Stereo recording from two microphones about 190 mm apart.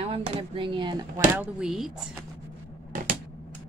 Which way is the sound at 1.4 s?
Centre (ahead or behind).